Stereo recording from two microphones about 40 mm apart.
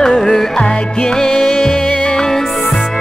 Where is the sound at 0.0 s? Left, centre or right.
Centre.